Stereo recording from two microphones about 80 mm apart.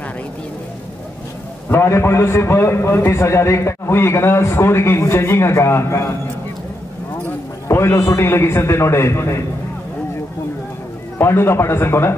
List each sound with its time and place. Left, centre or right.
1.7 s a man's voice: left
7.6 s a man's voice: left
11.1 s a man's voice: left